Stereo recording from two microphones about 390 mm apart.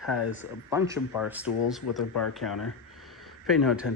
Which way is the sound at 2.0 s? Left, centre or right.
Left.